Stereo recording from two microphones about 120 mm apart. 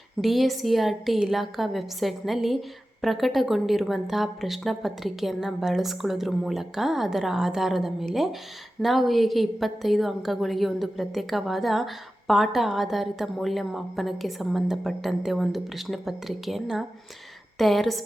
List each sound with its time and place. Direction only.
0.2 s a woman's voice: centre (ahead or behind)